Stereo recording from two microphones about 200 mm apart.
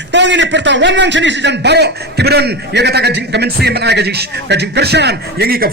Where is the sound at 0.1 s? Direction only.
60° right (ahead or behind).